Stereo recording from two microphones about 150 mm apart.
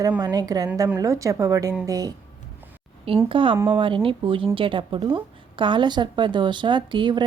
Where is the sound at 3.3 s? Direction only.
35° right (ahead or behind).